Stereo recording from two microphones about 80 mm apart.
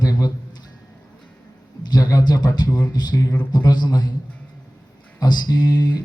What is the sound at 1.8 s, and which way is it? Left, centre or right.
Speech, left.